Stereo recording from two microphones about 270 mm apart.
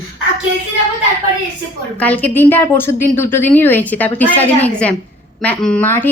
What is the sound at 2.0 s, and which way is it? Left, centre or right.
A woman's voice, centre.